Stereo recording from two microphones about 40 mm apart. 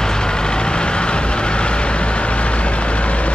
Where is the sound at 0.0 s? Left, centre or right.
Centre.